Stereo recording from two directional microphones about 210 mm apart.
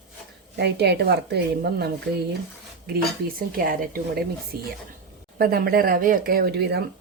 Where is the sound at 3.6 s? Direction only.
45° right (ahead or behind).